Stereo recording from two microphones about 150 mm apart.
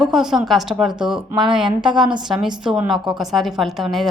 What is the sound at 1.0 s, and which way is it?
Speech, 30° right (ahead or behind).